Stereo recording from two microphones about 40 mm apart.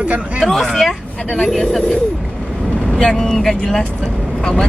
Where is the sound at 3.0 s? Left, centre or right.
Centre.